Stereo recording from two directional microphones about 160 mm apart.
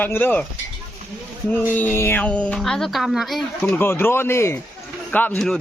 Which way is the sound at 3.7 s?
15° left (ahead or behind).